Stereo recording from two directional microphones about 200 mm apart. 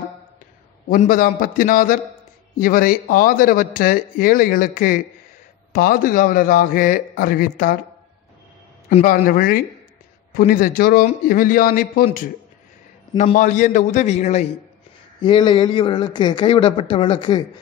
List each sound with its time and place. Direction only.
0.8 s speech: 45° left (ahead or behind)
9.0 s speech: 45° left (ahead or behind)
13.2 s a man's voice: 40° left (ahead or behind)
15.2 s speech: 20° left (ahead or behind)